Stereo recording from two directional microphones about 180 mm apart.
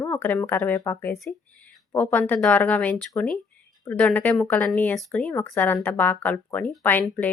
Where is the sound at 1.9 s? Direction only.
10° left (ahead or behind).